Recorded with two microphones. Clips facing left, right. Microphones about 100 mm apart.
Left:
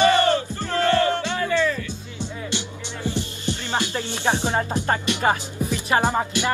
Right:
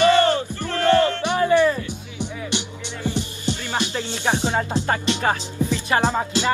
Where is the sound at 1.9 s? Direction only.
15° right (ahead or behind).